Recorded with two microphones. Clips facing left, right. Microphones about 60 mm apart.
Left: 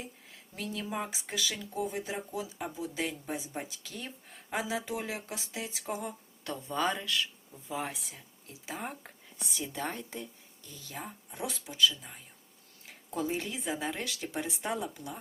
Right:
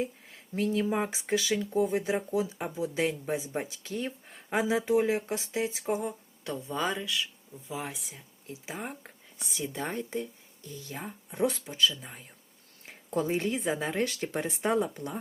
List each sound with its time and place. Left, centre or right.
0.0 s speech: right
1.7 s speech: right; by 9.1 s centre
9.4 s speech: right
11.3 s speech: right